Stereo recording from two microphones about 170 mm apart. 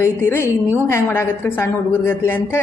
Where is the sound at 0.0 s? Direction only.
15° left (ahead or behind).